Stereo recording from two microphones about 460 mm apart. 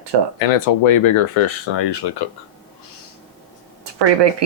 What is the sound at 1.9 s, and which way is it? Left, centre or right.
Speech, left.